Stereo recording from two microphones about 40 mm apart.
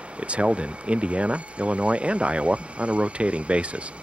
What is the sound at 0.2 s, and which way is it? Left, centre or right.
Speech, right.